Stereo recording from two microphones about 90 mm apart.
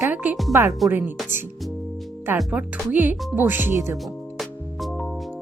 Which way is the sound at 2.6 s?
10° right (ahead or behind).